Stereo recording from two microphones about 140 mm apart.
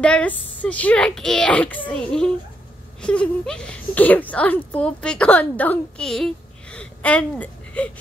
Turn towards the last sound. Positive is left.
turn(degrees=10)  # may be behind; listen again after turning